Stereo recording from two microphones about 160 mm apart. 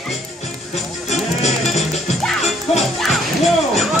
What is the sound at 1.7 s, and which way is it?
Music, 45° left (ahead or behind).